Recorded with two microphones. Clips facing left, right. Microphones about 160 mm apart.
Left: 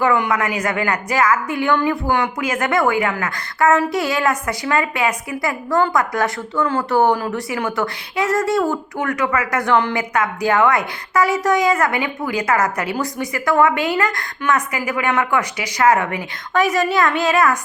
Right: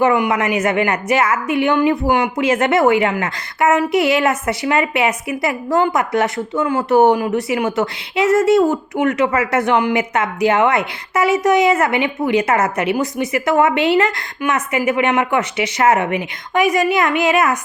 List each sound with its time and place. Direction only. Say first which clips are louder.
0.0 s a woman's voice: right 3 dB; 20° right (ahead or behind)